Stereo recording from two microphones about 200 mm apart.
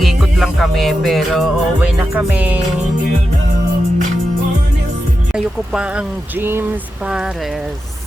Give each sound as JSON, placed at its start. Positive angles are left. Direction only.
{"t": 0.0, "sound": "music", "side_deg": 0}
{"t": 5.3, "sound": "speech", "side_deg": -5}